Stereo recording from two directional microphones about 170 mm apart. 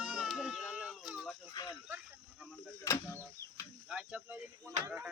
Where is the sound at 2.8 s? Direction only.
15° left (ahead or behind).